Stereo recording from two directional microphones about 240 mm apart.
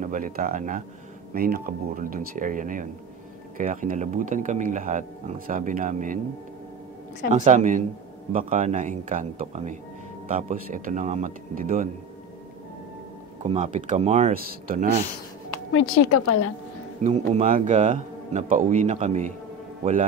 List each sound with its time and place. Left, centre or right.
0.0 s speech: right
7.2 s speech: right
13.4 s speech: right
15.7 s a woman's voice: left
17.0 s speech: right